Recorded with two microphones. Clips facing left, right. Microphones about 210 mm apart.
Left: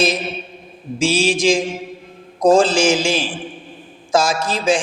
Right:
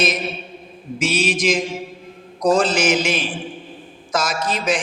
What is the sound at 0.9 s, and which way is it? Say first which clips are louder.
A man's voice: left 4 dB; 30° left (ahead or behind).